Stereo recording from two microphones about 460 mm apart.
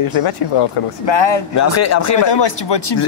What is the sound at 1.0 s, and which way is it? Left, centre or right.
Speech, left.